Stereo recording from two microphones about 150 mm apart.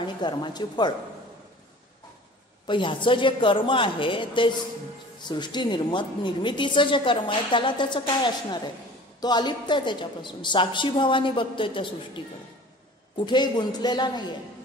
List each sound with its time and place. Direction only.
0.0 s speech: 30° left (ahead or behind)
2.6 s a woman's voice: 35° left (ahead or behind)
9.2 s a woman's voice: 30° left (ahead or behind)
13.2 s a woman's voice: 30° left (ahead or behind)